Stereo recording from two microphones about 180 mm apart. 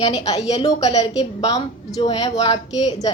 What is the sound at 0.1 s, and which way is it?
A woman's voice, 20° left (ahead or behind).